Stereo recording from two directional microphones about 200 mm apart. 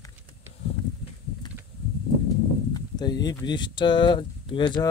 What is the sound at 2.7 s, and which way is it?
Speech, 20° left (ahead or behind).